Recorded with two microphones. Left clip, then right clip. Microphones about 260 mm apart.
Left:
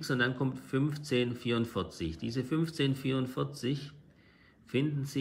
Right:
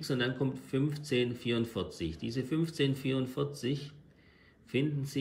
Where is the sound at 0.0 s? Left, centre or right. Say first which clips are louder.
Left 2 dB; centre.